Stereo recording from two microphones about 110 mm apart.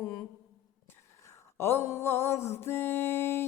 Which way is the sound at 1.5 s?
20° left (ahead or behind).